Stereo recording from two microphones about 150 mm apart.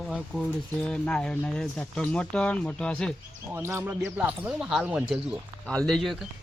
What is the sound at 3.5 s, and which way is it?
Speech, 15° right (ahead or behind).